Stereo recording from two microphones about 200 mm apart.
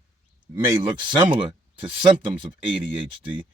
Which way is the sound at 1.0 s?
25° right (ahead or behind).